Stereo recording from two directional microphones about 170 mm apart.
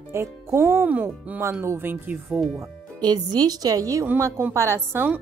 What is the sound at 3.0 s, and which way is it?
A woman's voice, 25° right (ahead or behind).